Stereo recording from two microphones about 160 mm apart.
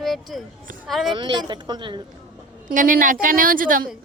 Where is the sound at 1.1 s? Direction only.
30° right (ahead or behind).